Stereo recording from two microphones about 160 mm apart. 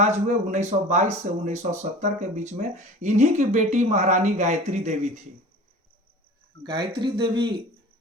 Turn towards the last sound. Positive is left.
turn(degrees=-30)  # may be behind; listen again after turning